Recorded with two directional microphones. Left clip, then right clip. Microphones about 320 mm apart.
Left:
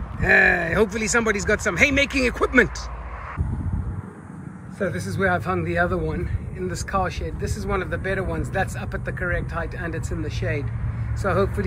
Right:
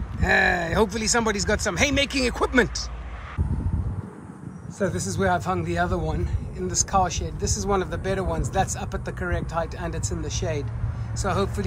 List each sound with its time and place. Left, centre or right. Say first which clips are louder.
0.2 s speech: left 4 dB; centre
4.7 s a man's voice: even; centre